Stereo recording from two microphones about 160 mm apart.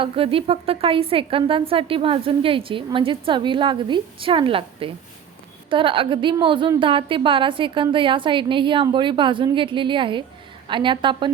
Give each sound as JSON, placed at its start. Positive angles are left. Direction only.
{"t": 0.0, "sound": "a woman's voice", "side_deg": -35}